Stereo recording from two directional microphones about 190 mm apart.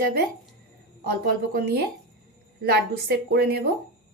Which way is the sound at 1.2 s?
50° right (ahead or behind).